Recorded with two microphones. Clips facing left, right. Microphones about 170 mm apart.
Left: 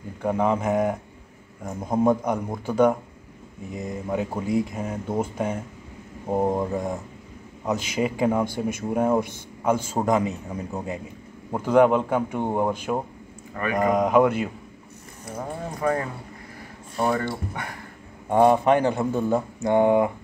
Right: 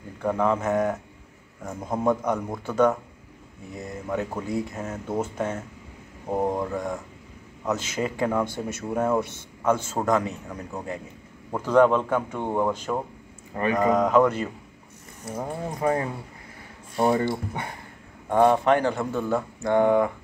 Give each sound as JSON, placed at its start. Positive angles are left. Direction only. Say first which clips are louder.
{"t": 0.2, "sound": "speech", "louder": "left 1 dB", "side_deg": 15}
{"t": 13.5, "sound": "speech", "louder": "right 3 dB", "side_deg": -25}
{"t": 13.9, "sound": "speech", "louder": "left 3 dB", "side_deg": 10}
{"t": 15.8, "sound": "speech", "louder": "even", "side_deg": -20}
{"t": 18.3, "sound": "speech", "louder": "left 1 dB", "side_deg": 15}